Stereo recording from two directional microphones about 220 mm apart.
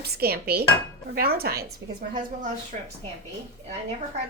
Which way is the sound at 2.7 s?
35° right (ahead or behind).